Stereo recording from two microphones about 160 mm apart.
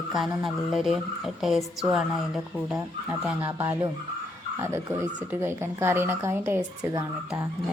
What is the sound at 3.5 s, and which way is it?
Speech, 20° right (ahead or behind).